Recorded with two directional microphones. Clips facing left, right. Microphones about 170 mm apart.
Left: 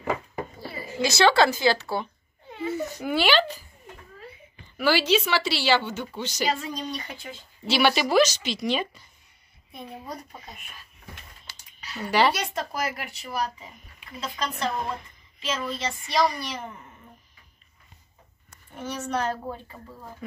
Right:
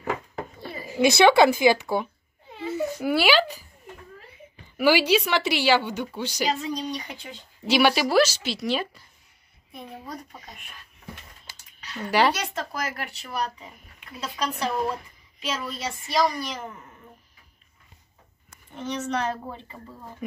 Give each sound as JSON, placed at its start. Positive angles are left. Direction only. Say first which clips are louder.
{"t": 0.6, "sound": "a sound", "louder": "right 5 dB", "side_deg": -20}
{"t": 1.6, "sound": "a woman's voice", "louder": "right 3 dB", "side_deg": -15}
{"t": 4.7, "sound": "a woman's voice", "louder": "right 2 dB", "side_deg": -10}
{"t": 10.0, "sound": "speech", "louder": "even", "side_deg": 5}
{"t": 11.8, "sound": "a sound", "louder": "even", "side_deg": 10}
{"t": 12.3, "sound": "speech", "louder": "even", "side_deg": 10}
{"t": 18.8, "sound": "speech", "louder": "right 1 dB", "side_deg": 5}